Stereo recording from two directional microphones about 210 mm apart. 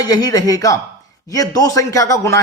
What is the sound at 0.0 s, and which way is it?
A man's voice, 20° left (ahead or behind).